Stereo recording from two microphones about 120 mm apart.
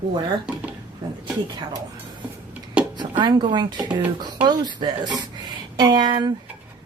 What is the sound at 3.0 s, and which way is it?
A woman's voice, 40° right (ahead or behind).